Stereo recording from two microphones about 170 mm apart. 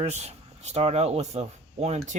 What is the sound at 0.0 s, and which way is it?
Speech, 40° right (ahead or behind).